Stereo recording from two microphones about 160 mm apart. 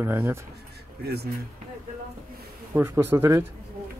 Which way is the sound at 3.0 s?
15° right (ahead or behind).